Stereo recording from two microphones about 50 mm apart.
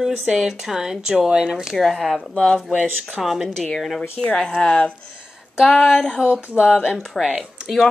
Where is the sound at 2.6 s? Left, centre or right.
Right.